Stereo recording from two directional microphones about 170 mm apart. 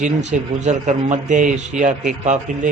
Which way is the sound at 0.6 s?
45° right (ahead or behind).